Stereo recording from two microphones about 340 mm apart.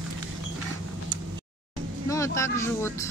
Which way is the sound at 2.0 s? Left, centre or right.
Centre.